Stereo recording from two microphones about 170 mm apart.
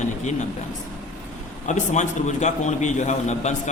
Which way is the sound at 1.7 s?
45° left (ahead or behind).